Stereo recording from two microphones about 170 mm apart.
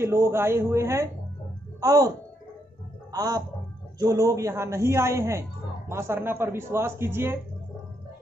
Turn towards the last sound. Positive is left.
turn(degrees=-15)  # may be behind; listen again after turning